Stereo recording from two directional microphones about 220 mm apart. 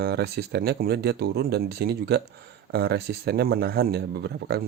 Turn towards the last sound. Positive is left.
turn(degrees=-45)  # may be behind; listen again after turning